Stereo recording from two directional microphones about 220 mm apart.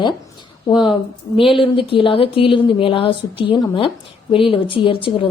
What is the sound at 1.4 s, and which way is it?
A woman's voice, 25° left (ahead or behind).